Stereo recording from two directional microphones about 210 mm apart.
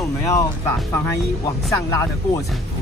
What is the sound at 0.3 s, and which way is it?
Speech, 15° left (ahead or behind).